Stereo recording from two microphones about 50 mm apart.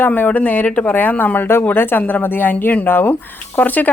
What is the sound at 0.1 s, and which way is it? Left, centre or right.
Speech, left.